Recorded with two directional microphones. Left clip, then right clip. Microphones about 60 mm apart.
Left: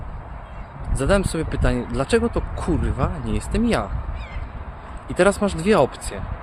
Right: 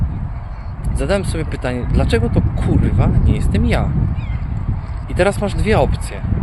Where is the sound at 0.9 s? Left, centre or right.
Left.